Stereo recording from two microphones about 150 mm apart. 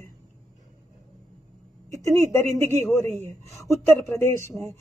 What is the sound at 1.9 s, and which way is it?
A woman's voice, 20° left (ahead or behind).